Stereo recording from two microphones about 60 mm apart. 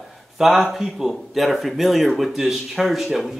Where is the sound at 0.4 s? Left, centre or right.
Centre.